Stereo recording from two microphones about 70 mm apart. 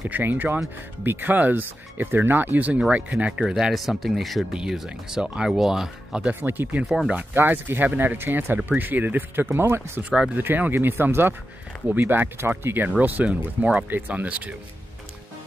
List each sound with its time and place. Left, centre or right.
0.1 s speech: right
3.3 s speech: centre
6.4 s speech: right
10.0 s speech: centre
10.3 s speech: right